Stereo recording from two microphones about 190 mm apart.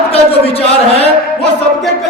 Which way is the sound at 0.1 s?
30° left (ahead or behind).